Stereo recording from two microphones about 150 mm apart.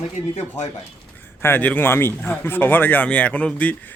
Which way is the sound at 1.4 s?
15° left (ahead or behind).